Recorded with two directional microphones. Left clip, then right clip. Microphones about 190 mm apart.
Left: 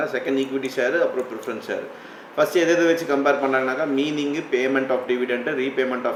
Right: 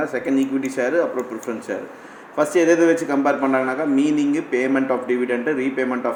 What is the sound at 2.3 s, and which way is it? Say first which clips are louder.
Speech: right 2 dB; 40° right (ahead or behind).